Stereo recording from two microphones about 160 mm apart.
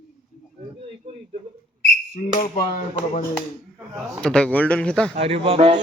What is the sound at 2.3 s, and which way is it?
Speech, 45° left (ahead or behind).